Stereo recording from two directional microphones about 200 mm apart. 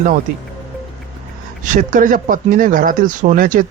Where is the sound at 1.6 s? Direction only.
40° right (ahead or behind).